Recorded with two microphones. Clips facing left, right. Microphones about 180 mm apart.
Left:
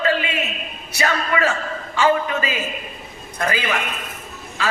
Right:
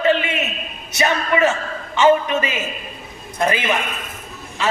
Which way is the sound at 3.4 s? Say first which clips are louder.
Right 3 dB; 20° right (ahead or behind).